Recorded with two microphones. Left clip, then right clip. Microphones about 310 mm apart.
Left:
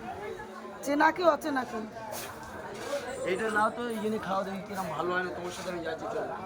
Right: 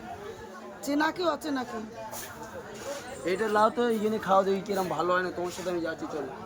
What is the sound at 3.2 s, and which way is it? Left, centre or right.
A man's voice, centre.